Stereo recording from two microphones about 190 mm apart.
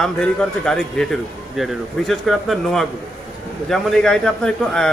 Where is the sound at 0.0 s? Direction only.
5° left (ahead or behind).